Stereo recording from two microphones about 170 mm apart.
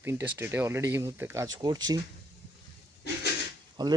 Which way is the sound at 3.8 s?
25° right (ahead or behind).